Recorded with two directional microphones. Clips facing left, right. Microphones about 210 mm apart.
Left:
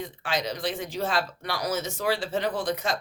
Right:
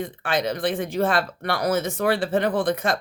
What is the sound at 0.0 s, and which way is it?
Speech, 55° right (ahead or behind).